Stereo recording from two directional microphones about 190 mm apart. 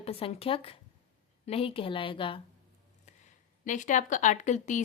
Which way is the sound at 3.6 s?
40° left (ahead or behind).